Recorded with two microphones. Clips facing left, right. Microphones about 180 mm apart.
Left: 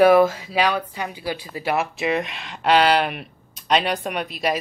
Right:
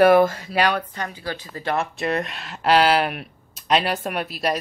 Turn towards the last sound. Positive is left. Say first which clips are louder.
# even
turn(degrees=0)  # may be behind; listen again after turning